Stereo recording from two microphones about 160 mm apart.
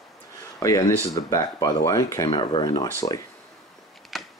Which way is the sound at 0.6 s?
20° left (ahead or behind).